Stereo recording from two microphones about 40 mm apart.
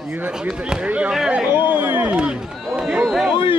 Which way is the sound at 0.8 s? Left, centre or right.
Right.